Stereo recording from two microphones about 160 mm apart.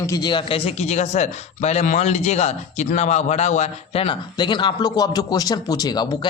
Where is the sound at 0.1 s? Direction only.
25° left (ahead or behind).